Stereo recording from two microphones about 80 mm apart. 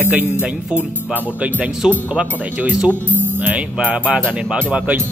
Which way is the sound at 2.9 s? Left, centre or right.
Right.